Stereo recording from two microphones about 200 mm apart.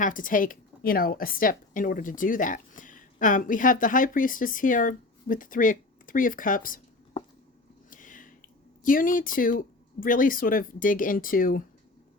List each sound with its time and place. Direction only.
0.0 s a woman's voice: 40° left (ahead or behind)
7.9 s a sound: 40° left (ahead or behind)
8.8 s a woman's voice: 45° left (ahead or behind)